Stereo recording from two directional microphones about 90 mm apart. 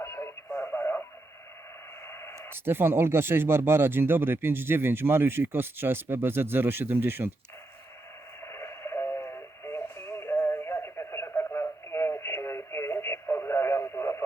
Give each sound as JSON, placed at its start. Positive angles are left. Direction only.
{"t": 0.0, "sound": "radio", "side_deg": 30}
{"t": 2.0, "sound": "radio", "side_deg": 30}
{"t": 2.5, "sound": "speech", "side_deg": -25}
{"t": 8.4, "sound": "radio", "side_deg": 30}